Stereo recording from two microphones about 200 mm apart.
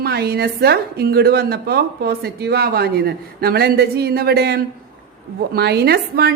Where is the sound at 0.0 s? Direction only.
50° right (ahead or behind).